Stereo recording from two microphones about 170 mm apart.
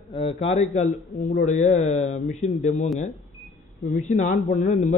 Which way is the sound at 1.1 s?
45° left (ahead or behind).